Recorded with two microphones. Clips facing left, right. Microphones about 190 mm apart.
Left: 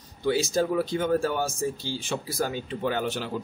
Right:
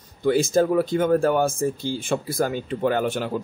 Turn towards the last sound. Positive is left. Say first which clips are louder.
# right 5 dB
turn(degrees=-50)  # may be behind; listen again after turning